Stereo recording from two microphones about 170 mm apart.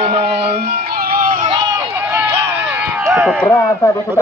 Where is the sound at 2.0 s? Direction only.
10° right (ahead or behind).